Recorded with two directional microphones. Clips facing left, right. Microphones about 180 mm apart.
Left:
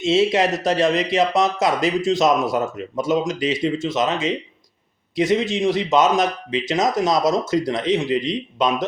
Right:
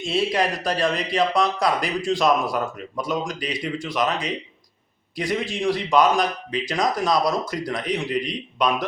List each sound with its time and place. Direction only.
0.0 s speech: 25° left (ahead or behind)